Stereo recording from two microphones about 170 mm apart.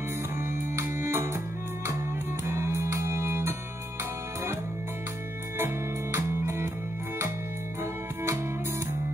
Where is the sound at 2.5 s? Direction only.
15° right (ahead or behind).